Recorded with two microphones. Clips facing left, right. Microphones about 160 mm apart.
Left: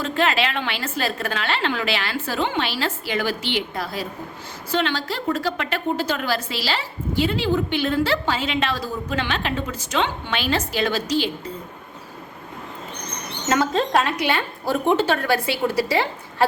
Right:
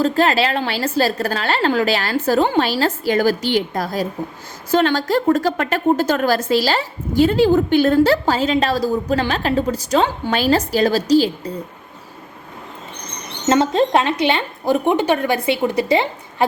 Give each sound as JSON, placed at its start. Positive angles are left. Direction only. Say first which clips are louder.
{"t": 0.0, "sound": "a woman's voice", "louder": "right 5 dB", "side_deg": -40}
{"t": 13.5, "sound": "a woman's voice", "louder": "right 5 dB", "side_deg": -25}